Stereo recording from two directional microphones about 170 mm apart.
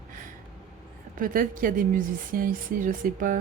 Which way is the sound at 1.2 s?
55° right (ahead or behind).